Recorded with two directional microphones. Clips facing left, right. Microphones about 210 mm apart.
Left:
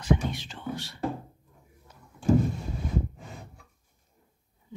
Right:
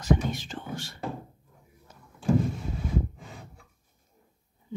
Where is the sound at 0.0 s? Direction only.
45° right (ahead or behind).